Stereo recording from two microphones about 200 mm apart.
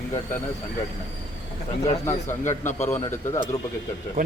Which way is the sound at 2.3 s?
10° left (ahead or behind).